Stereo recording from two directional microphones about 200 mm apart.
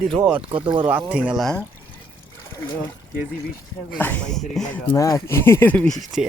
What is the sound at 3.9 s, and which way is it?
Speech, 10° left (ahead or behind).